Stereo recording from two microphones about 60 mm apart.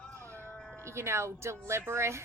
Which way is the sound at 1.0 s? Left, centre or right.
Right.